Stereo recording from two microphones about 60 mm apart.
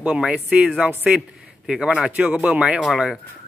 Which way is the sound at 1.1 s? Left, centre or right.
Centre.